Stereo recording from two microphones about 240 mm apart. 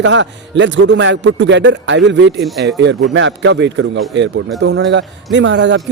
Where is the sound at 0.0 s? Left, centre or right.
Right.